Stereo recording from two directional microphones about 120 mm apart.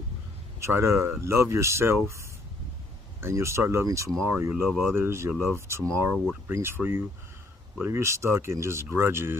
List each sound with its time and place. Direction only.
0.6 s speech: 20° right (ahead or behind)
3.2 s speech: 20° right (ahead or behind)